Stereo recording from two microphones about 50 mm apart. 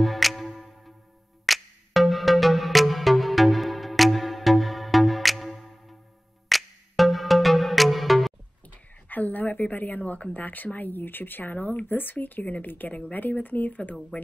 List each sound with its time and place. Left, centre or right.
0.0 s music: centre
8.6 s speech: left